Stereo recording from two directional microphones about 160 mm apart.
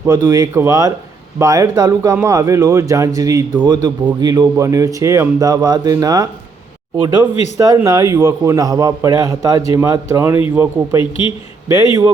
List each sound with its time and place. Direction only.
0.1 s a man's voice: 20° right (ahead or behind)
11.7 s a man's voice: 25° right (ahead or behind)